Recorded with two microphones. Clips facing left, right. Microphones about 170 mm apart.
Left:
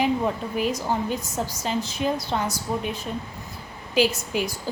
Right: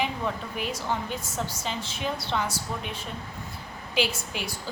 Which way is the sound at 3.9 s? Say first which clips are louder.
Left 7 dB; 45° left (ahead or behind).